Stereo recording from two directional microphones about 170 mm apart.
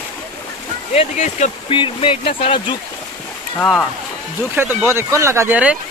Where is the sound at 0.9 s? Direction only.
45° left (ahead or behind).